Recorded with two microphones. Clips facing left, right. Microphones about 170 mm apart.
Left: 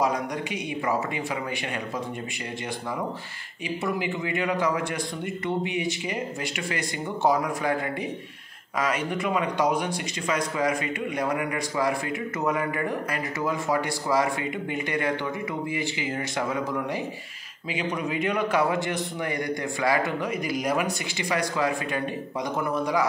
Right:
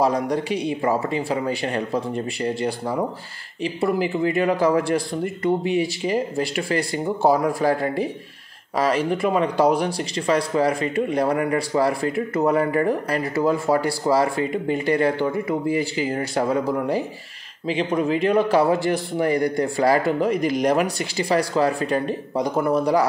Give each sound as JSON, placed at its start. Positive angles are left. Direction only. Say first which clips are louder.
{"t": 0.0, "sound": "speech", "louder": "right 6 dB", "side_deg": -35}
{"t": 3.8, "sound": "speech", "louder": "right 8 dB", "side_deg": -35}
{"t": 5.6, "sound": "speech", "louder": "right 6 dB", "side_deg": 15}
{"t": 6.0, "sound": "speech", "louder": "right 8 dB", "side_deg": -30}